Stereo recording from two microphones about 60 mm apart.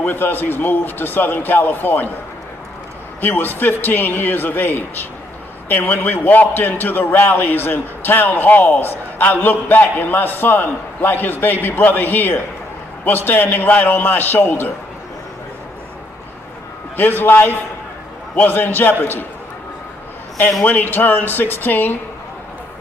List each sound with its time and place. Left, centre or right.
0.0 s a man's voice: left
3.2 s a man's voice: left
16.9 s a man's voice: left
20.6 s a man's voice: left